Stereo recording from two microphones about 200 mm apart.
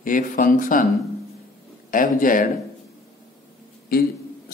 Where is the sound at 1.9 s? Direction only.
40° left (ahead or behind).